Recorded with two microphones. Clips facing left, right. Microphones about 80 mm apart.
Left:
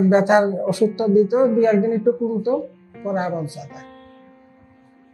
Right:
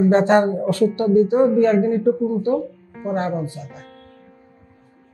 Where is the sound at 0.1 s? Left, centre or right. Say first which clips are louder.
Even; centre.